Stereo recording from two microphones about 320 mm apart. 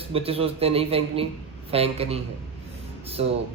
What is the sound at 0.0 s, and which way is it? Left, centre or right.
Speech, centre.